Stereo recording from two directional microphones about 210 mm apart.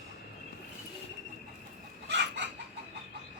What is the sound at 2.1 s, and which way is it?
Chicken, 55° right (ahead or behind).